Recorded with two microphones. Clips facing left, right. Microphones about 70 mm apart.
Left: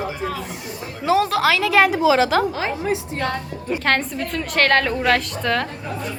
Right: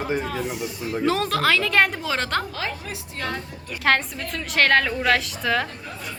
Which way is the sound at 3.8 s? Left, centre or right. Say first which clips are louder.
Right 1 dB; centre.